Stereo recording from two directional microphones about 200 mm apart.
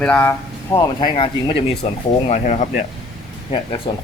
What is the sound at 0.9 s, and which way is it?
Speech, 25° left (ahead or behind).